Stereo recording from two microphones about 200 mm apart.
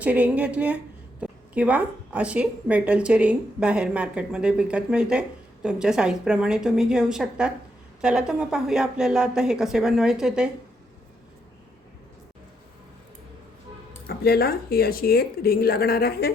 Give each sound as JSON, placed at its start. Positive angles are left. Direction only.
{"t": 0.0, "sound": "a woman's voice", "side_deg": -5}
{"t": 14.1, "sound": "a woman's voice", "side_deg": 50}